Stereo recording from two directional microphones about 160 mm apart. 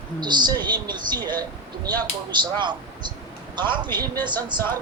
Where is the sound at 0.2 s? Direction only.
25° right (ahead or behind).